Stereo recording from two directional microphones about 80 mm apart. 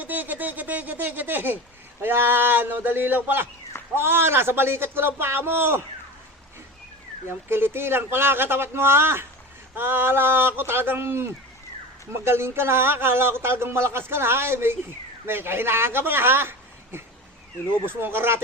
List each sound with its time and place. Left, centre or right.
0.0 s a sound: right
2.0 s a man's voice: right
7.3 s a man's voice: right